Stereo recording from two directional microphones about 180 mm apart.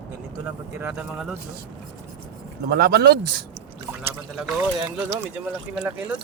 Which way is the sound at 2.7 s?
60° right (ahead or behind).